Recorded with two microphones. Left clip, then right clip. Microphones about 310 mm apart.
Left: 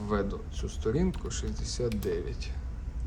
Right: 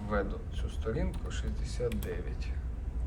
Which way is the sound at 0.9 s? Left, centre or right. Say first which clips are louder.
Left 6 dB; centre.